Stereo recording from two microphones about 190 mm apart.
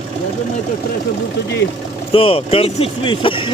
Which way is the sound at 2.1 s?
30° left (ahead or behind).